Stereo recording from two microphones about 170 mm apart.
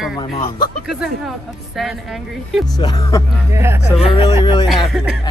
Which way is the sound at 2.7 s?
25° left (ahead or behind).